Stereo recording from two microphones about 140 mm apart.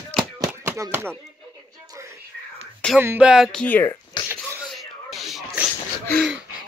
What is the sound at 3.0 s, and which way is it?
Music, 10° right (ahead or behind).